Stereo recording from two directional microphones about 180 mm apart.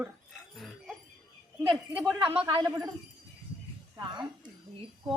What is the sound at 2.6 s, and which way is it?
Speech, 15° right (ahead or behind).